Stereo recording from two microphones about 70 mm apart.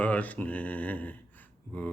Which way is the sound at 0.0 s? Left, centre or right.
Left.